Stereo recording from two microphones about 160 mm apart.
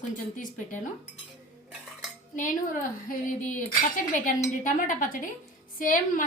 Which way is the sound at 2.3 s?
55° left (ahead or behind).